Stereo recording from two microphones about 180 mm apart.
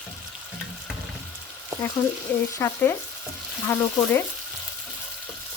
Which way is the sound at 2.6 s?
15° left (ahead or behind).